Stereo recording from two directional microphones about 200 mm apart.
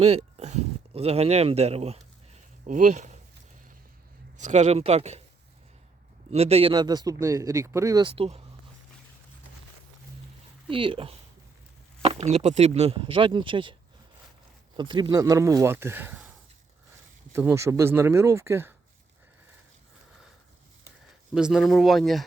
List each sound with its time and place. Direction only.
0.0 s speech: 30° right (ahead or behind)
4.4 s speech: 35° right (ahead or behind)
6.3 s speech: 30° right (ahead or behind)
10.7 s speech: 25° right (ahead or behind)
14.8 s speech: 25° right (ahead or behind)
17.3 s speech: 15° right (ahead or behind)
21.3 s speech: 5° right (ahead or behind)